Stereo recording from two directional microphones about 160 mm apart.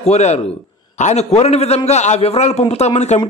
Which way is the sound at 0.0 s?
45° left (ahead or behind).